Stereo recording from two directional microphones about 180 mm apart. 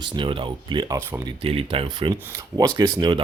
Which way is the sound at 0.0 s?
30° right (ahead or behind).